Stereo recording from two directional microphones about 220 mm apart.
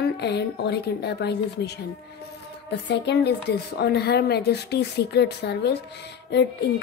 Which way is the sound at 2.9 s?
50° left (ahead or behind).